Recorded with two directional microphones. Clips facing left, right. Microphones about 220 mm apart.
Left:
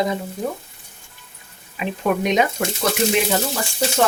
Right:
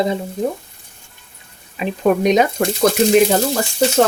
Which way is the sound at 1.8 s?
40° right (ahead or behind).